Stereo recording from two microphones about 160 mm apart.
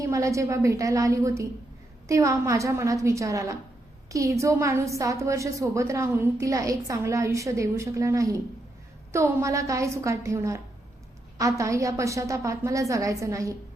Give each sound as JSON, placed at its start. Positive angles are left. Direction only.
{"t": 0.0, "sound": "a woman's voice", "side_deg": -20}